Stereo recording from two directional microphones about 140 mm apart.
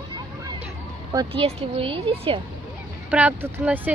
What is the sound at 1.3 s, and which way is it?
Speech, 45° right (ahead or behind).